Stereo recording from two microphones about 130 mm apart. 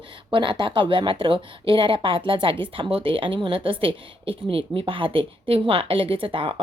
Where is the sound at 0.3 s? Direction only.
40° right (ahead or behind).